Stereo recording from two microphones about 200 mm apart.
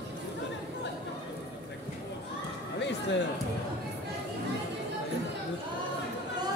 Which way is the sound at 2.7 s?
60° left (ahead or behind).